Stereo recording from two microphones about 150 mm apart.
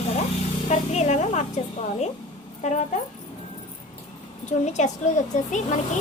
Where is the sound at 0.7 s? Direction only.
50° left (ahead or behind).